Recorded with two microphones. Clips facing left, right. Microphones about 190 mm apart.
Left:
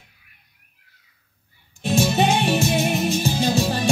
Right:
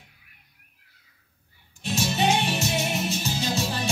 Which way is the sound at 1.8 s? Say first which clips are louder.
Left 6 dB; 55° left (ahead or behind).